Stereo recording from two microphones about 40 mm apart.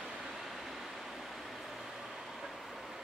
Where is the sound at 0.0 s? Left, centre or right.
Centre.